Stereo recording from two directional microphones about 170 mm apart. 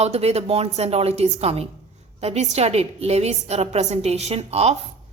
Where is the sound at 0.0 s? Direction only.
35° right (ahead or behind).